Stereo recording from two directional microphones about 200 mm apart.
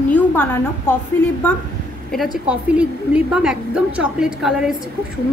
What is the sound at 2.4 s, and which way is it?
A woman's voice, 5° right (ahead or behind).